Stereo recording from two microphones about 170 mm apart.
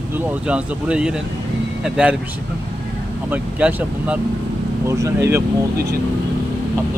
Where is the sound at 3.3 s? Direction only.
10° right (ahead or behind).